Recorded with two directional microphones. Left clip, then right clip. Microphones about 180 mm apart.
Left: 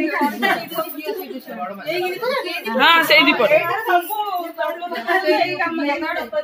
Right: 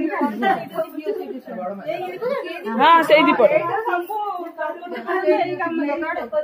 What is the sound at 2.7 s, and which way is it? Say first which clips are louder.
Speech: even; 15° right (ahead or behind).